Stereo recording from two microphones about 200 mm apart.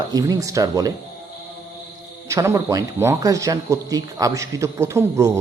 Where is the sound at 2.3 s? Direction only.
15° right (ahead or behind).